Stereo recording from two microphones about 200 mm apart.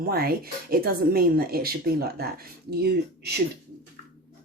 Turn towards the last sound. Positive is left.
turn(degrees=-55)  # may be behind; listen again after turning